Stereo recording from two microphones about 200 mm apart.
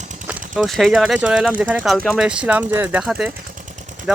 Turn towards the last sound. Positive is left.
turn(degrees=-40)  # may be behind; listen again after turning